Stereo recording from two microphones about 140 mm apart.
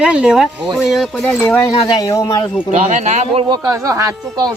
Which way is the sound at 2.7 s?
55° right (ahead or behind).